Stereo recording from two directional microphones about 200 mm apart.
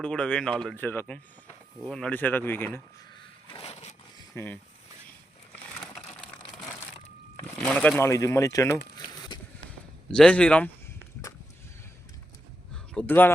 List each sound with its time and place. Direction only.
0.0 s speech: 5° left (ahead or behind)
3.6 s a sound: 30° left (ahead or behind)
4.4 s speech: 10° left (ahead or behind)
7.3 s speech: 5° left (ahead or behind)
10.1 s speech: 5° left (ahead or behind)
12.7 s a sound: 5° left (ahead or behind)